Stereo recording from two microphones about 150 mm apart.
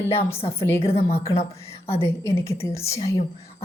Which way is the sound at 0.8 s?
40° left (ahead or behind).